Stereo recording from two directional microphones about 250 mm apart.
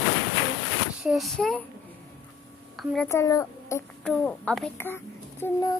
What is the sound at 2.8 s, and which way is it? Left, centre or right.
A woman's voice, centre.